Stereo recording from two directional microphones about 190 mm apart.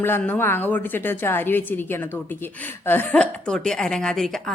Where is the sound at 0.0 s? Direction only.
10° left (ahead or behind).